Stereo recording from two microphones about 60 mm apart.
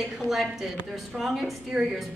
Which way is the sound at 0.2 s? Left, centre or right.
Centre.